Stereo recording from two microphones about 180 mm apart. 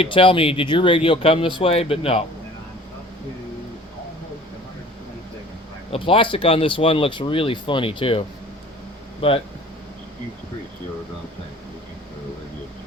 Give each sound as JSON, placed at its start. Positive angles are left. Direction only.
{"t": 0.0, "sound": "speech", "side_deg": 30}
{"t": 5.9, "sound": "speech", "side_deg": 30}